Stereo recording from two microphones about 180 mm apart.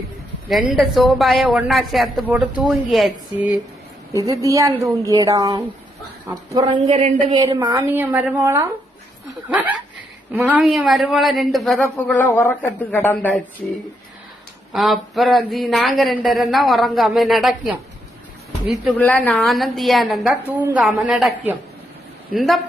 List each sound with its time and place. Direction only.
0.7 s a man's voice: centre (ahead or behind)
4.1 s speech: 20° right (ahead or behind)
6.7 s speech: 40° right (ahead or behind)
7.3 s speech: 25° right (ahead or behind)
7.8 s a man's voice: 10° right (ahead or behind); by 13.4 s 10° left (ahead or behind)
14.7 s a man's voice: centre (ahead or behind)
19.0 s a man's voice: 10° left (ahead or behind)